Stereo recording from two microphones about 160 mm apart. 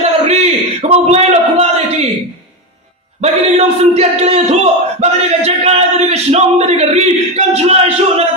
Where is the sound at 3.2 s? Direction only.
40° right (ahead or behind).